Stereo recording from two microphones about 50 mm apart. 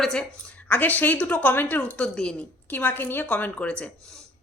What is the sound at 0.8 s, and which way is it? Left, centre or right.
Speech, left.